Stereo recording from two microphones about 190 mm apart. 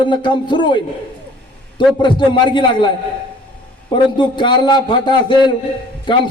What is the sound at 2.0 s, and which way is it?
Speech, 25° left (ahead or behind).